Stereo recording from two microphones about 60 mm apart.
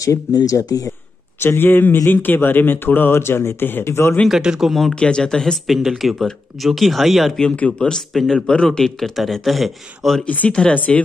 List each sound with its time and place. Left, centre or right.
0.0 s speech: left
1.4 s speech: left
4.3 s speech: centre
4.9 s speech: centre
5.8 s speech: centre
7.5 s speech: left
7.9 s speech: centre
10.2 s speech: left